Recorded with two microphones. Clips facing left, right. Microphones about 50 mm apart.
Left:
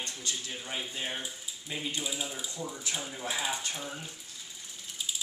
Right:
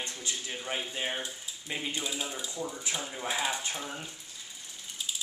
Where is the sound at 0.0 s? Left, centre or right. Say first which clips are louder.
Right 1 dB; right.